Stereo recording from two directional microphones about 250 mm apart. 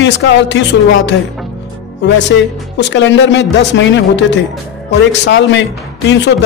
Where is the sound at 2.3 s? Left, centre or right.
Left.